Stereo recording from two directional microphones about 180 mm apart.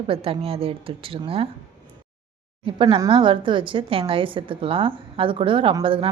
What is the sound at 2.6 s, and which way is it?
A woman's voice, 30° right (ahead or behind).